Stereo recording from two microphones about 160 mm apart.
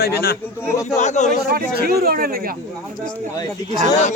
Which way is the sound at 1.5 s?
70° right (ahead or behind).